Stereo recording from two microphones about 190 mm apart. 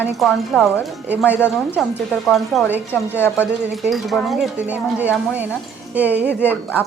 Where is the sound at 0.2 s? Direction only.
Centre (ahead or behind).